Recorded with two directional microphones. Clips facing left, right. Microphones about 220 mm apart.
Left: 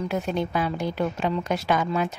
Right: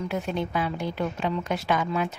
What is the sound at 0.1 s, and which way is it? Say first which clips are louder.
A woman's voice: left 2 dB; 40° left (ahead or behind).